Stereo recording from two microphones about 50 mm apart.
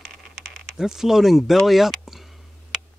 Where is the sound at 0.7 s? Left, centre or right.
Centre.